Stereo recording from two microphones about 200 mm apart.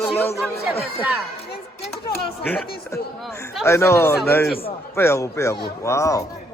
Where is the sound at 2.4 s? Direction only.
10° left (ahead or behind).